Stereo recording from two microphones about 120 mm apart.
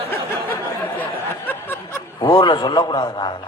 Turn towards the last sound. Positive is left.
turn(degrees=40)  # may be behind; listen again after turning